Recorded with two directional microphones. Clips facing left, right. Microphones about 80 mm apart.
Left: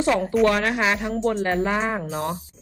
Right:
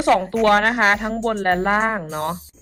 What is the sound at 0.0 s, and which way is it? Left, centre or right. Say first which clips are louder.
Speech: right 4 dB; right.